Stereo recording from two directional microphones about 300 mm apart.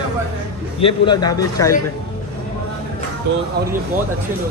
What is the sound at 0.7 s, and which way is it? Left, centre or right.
Speech, centre.